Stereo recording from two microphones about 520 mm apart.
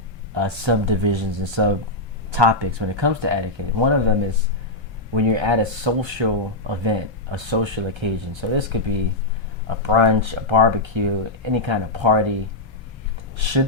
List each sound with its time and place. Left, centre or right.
0.3 s speech: right
5.1 s speech: right
13.4 s speech: right